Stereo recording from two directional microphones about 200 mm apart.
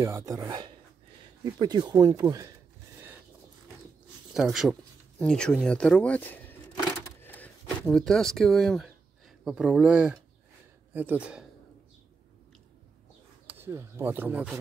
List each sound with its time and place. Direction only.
0.0 s speech: 15° right (ahead or behind)
4.3 s speech: centre (ahead or behind)
7.2 s a sound: 10° left (ahead or behind)
9.4 s a man's voice: 5° right (ahead or behind)
13.5 s speech: 10° right (ahead or behind)